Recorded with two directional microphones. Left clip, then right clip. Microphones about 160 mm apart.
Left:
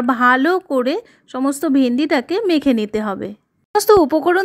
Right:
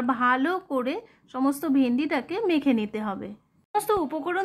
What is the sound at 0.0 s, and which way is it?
A woman's voice, 35° left (ahead or behind).